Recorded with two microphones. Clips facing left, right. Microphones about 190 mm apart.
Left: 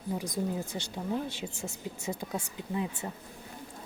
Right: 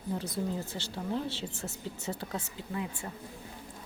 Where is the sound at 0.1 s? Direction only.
15° left (ahead or behind).